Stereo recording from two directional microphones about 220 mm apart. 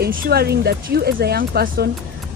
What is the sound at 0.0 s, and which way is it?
Speech, 45° right (ahead or behind).